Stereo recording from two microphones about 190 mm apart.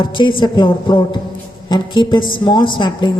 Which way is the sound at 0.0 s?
25° left (ahead or behind).